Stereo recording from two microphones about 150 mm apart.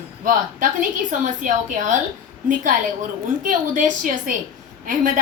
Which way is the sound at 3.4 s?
60° right (ahead or behind).